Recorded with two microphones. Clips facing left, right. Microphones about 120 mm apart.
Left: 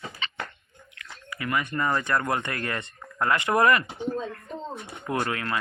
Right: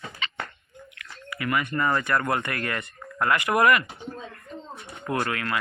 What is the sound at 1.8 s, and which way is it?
Speech, 20° left (ahead or behind).